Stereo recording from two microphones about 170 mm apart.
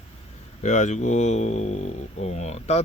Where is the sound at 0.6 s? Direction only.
45° left (ahead or behind).